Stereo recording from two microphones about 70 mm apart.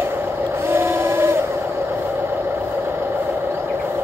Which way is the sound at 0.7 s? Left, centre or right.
Right.